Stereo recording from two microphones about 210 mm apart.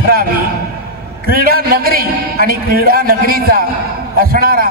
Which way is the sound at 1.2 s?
45° right (ahead or behind).